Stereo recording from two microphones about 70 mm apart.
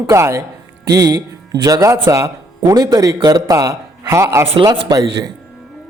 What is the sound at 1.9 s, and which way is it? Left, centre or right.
A man's voice, right.